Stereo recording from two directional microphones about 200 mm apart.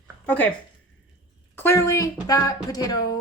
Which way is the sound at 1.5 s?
15° left (ahead or behind).